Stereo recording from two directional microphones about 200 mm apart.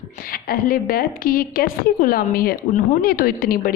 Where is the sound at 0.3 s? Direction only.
45° left (ahead or behind).